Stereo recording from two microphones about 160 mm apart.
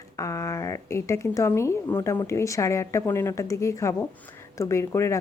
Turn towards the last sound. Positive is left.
turn(degrees=20)  # may be behind; listen again after turning